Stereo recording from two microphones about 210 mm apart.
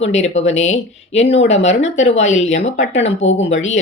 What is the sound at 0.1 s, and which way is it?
A woman's voice, 30° left (ahead or behind).